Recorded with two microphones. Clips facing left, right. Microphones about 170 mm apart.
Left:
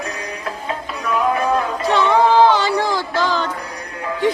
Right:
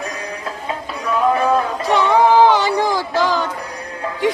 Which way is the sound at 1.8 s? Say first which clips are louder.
Right 1 dB; 15° right (ahead or behind).